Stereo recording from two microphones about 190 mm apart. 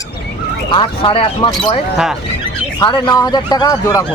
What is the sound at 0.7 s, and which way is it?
Speech, 25° left (ahead or behind).